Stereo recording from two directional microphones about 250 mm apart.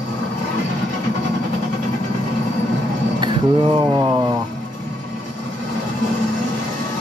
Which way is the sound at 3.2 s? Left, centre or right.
Centre.